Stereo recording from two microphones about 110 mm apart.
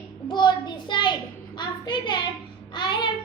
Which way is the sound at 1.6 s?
45° left (ahead or behind).